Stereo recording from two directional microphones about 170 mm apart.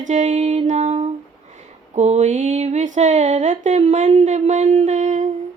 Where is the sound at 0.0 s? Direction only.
45° right (ahead or behind).